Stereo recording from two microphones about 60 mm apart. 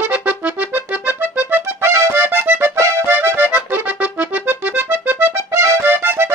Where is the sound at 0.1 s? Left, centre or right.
Right.